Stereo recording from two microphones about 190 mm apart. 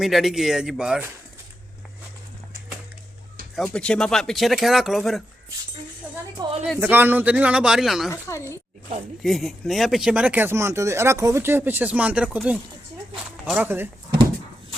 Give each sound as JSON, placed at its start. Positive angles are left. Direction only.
{"t": 0.0, "sound": "speech", "side_deg": 0}
{"t": 3.5, "sound": "speech", "side_deg": 0}
{"t": 6.4, "sound": "a sound", "side_deg": -20}
{"t": 6.8, "sound": "speech", "side_deg": -10}
{"t": 8.1, "sound": "speech", "side_deg": 15}
{"t": 9.2, "sound": "speech", "side_deg": 0}